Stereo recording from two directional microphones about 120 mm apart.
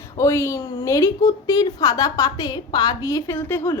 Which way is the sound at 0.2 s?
25° left (ahead or behind).